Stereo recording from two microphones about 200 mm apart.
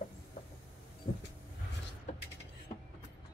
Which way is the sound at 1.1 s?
50° left (ahead or behind).